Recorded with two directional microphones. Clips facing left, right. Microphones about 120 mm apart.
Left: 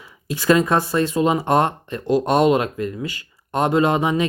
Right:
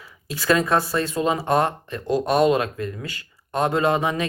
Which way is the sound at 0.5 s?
20° left (ahead or behind).